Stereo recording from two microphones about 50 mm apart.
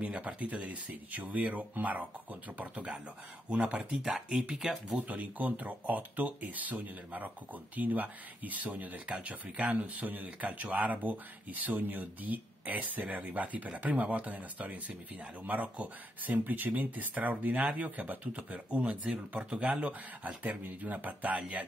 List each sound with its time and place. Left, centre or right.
0.0 s speech: right
4.0 s speech: centre
4.9 s speech: right
9.9 s speech: right
21.4 s speech: right